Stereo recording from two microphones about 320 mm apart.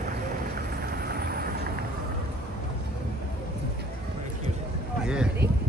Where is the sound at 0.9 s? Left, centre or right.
Right.